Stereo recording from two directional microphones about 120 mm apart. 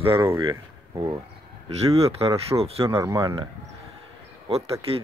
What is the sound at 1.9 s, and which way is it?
Speech, 55° right (ahead or behind).